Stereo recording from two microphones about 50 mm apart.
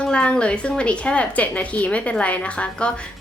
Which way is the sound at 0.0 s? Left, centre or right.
Left.